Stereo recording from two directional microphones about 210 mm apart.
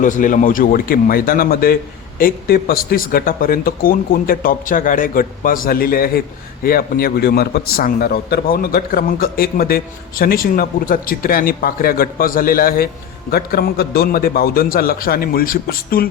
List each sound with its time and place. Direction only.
0.0 s a man's voice: 40° left (ahead or behind)